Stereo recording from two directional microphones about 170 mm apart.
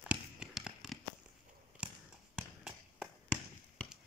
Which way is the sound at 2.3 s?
Centre (ahead or behind).